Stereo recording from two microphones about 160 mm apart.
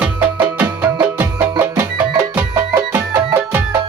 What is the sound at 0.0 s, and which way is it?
Music, 10° right (ahead or behind).